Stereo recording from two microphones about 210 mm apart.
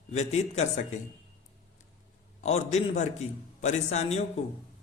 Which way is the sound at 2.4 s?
30° left (ahead or behind).